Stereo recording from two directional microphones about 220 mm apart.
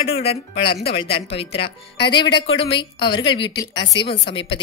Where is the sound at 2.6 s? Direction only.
20° left (ahead or behind).